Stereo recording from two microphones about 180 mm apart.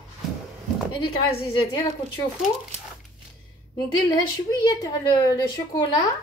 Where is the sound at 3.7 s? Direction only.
20° left (ahead or behind).